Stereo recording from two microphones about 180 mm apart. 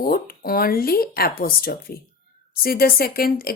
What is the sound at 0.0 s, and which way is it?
Speech, 55° left (ahead or behind).